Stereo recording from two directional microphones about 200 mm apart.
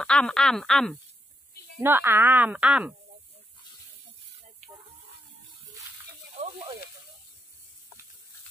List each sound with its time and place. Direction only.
0.0 s speech: 5° left (ahead or behind)
1.8 s speech: 10° right (ahead or behind)